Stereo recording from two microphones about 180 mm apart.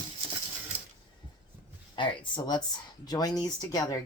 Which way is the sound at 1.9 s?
25° left (ahead or behind).